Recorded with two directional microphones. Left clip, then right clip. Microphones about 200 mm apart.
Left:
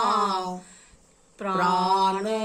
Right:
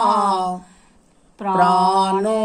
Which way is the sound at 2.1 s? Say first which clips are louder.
Right 8 dB; 5° right (ahead or behind).